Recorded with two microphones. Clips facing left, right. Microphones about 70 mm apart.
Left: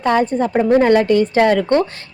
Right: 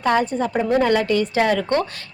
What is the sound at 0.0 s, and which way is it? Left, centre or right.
Speech, left.